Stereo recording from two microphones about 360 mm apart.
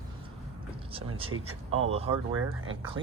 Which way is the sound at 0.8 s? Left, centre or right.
Centre.